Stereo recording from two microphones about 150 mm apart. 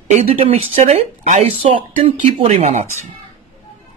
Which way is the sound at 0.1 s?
40° right (ahead or behind).